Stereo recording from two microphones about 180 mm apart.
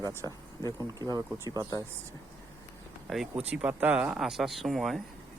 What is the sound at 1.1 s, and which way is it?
Speech, 20° right (ahead or behind).